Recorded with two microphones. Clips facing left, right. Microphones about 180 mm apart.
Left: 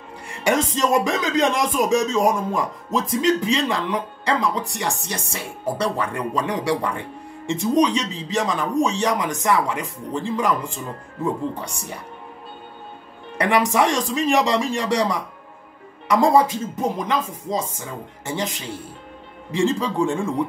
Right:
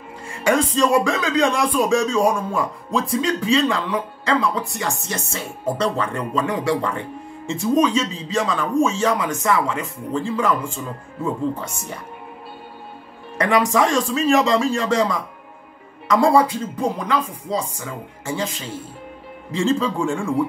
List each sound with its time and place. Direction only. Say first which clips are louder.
0.3 s speech: right 2 dB; 20° left (ahead or behind)
13.4 s speech: right 1 dB; 15° left (ahead or behind)